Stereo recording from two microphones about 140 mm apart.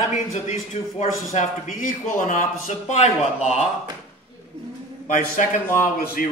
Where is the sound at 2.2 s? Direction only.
65° left (ahead or behind).